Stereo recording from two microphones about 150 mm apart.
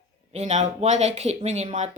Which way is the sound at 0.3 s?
50° right (ahead or behind).